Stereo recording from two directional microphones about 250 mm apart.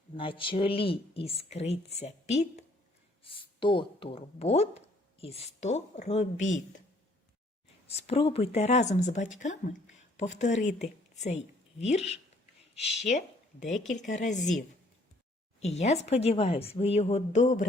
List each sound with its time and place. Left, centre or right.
0.2 s speech: left
7.9 s speech: left
15.6 s speech: left